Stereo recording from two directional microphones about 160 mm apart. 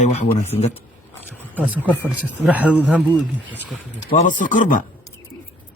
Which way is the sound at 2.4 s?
10° right (ahead or behind).